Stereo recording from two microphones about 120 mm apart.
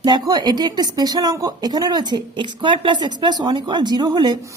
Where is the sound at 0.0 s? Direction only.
35° right (ahead or behind).